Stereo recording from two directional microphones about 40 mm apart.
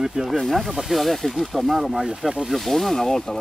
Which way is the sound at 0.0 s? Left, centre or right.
Centre.